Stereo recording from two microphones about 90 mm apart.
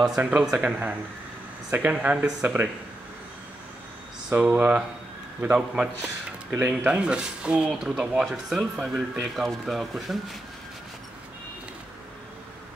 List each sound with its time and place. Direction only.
0.0 s speech: 10° right (ahead or behind)
4.3 s speech: 15° right (ahead or behind)